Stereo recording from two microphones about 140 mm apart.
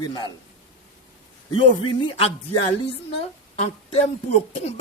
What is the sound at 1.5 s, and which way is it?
Speech, 40° left (ahead or behind).